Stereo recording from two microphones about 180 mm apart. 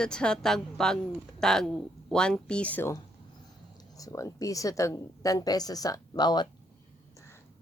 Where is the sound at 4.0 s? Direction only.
20° left (ahead or behind).